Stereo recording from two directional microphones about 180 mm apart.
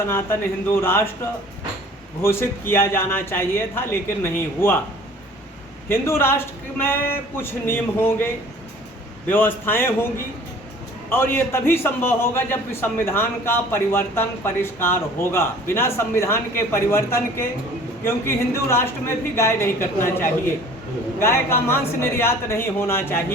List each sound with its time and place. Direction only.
0.1 s a man's voice: 15° left (ahead or behind)
2.2 s a man's voice: 15° left (ahead or behind)
5.9 s a man's voice: 15° left (ahead or behind)
11.1 s a man's voice: 10° left (ahead or behind)